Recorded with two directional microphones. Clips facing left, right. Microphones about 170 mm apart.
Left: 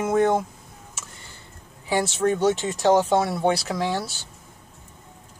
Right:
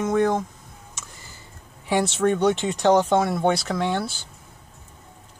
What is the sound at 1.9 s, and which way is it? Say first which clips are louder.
Speech: right 1 dB; 5° left (ahead or behind).